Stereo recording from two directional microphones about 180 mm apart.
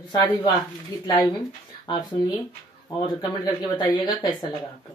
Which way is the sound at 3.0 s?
20° left (ahead or behind).